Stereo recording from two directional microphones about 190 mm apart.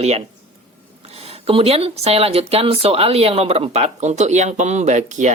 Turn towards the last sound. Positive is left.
turn(degrees=-40)  # may be behind; listen again after turning